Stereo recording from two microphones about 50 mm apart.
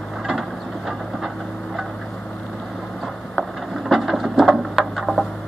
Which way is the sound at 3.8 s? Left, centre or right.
Centre.